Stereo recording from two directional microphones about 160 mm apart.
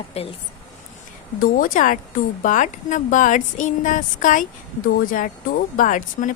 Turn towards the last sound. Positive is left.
turn(degrees=55)  # may be behind; listen again after turning